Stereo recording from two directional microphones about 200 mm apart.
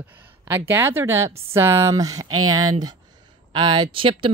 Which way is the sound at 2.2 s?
90° right.